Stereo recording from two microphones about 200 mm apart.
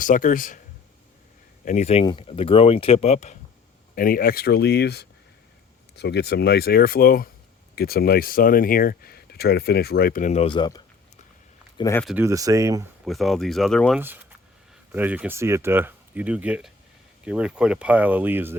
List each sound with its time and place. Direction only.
0.0 s speech: 40° left (ahead or behind)
1.6 s speech: 35° left (ahead or behind)
3.9 s speech: 45° left (ahead or behind); by 12.0 s 15° left (ahead or behind)
12.0 s speech: 10° right (ahead or behind)
13.1 s speech: centre (ahead or behind)
14.9 s speech: 10° right (ahead or behind)